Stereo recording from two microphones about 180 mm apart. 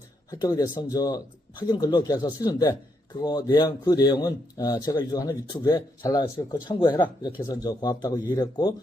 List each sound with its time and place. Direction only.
0.3 s a man's voice: 20° left (ahead or behind)